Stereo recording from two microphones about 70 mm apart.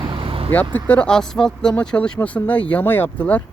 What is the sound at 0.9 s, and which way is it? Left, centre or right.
Speech, centre.